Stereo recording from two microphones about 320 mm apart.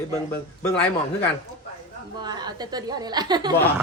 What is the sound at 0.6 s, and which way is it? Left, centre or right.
Speech, centre.